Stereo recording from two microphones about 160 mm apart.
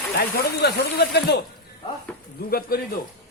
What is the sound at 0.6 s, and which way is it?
Speech, 90° left.